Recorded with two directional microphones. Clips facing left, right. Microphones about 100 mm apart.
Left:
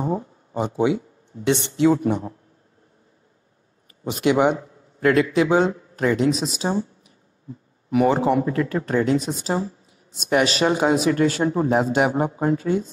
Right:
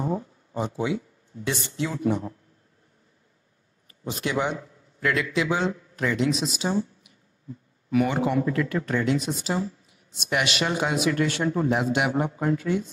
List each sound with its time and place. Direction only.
0.0 s a sound: 40° left (ahead or behind)
0.8 s speech: 60° left (ahead or behind)
1.9 s speech: 45° left (ahead or behind)
4.6 s speech: 45° left (ahead or behind)